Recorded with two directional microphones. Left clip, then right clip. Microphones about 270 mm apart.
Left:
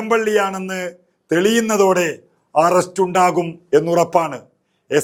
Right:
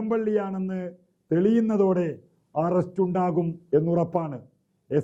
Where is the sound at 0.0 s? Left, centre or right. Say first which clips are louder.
Left 9 dB; centre.